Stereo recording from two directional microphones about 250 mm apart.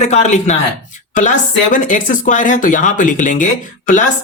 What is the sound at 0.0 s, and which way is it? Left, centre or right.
Speech, left.